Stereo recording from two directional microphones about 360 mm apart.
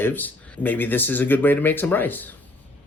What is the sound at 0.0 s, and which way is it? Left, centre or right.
Speech, centre.